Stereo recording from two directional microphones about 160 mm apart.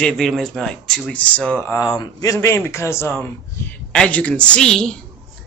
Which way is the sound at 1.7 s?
20° left (ahead or behind).